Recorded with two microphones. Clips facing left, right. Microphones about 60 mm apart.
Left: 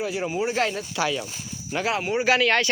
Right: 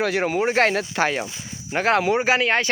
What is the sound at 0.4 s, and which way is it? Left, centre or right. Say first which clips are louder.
Speech: right 6 dB; right.